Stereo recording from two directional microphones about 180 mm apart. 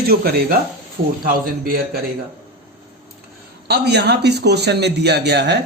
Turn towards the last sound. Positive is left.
turn(degrees=-65)  # may be behind; listen again after turning